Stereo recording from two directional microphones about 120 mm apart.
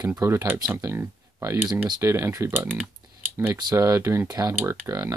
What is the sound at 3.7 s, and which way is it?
Speech, 25° right (ahead or behind).